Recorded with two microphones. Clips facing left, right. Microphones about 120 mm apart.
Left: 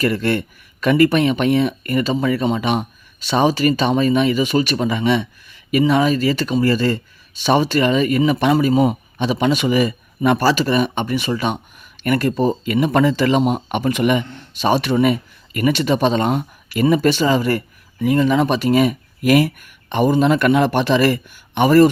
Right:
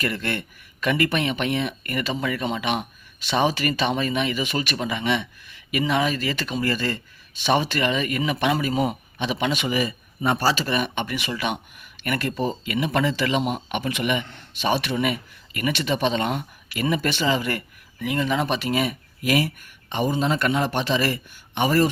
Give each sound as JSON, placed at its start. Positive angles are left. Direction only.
{"t": 0.0, "sound": "a man's voice", "side_deg": 40}